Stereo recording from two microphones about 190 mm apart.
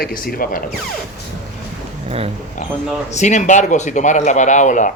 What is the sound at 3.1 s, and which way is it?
Speech, 40° left (ahead or behind).